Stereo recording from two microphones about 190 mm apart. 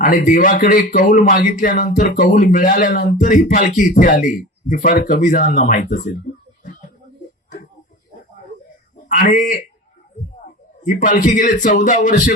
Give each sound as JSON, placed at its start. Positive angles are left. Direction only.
{"t": 0.0, "sound": "speech", "side_deg": 45}
{"t": 6.3, "sound": "a sound", "side_deg": 45}
{"t": 9.0, "sound": "a man's voice", "side_deg": 45}
{"t": 10.8, "sound": "speech", "side_deg": 45}